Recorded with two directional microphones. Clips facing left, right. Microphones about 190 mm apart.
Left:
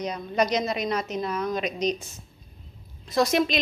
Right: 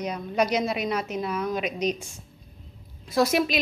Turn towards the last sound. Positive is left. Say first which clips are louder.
# even
turn(degrees=-5)  # may be behind; listen again after turning